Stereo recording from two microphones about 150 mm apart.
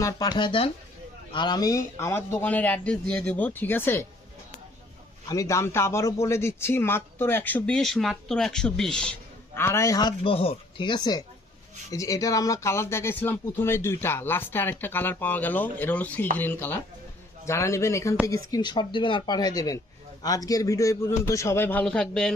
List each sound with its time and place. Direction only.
0.0 s speech: 30° left (ahead or behind)
5.3 s speech: 20° left (ahead or behind); by 9.1 s 5° left (ahead or behind)
9.6 s speech: 15° left (ahead or behind)
18.5 s speech: 30° left (ahead or behind); by 22.4 s 5° left (ahead or behind)